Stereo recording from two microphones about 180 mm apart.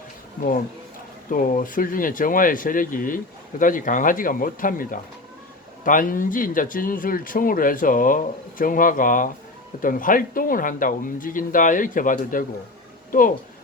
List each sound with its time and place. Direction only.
1.3 s speech: 50° left (ahead or behind)